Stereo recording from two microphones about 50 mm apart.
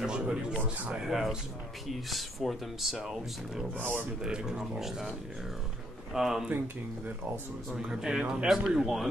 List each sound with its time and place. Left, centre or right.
0.0 s speech: centre
1.0 s speech: centre
6.1 s speech: centre
7.7 s speech: centre